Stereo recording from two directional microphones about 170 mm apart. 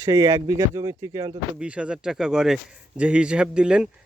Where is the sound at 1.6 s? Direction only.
5° right (ahead or behind).